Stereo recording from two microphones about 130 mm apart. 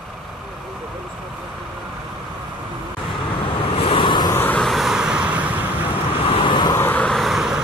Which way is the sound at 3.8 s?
45° left (ahead or behind).